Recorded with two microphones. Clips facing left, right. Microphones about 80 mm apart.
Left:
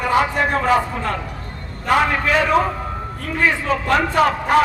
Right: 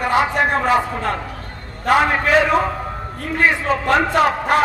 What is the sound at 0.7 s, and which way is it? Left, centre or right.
A man's voice, centre.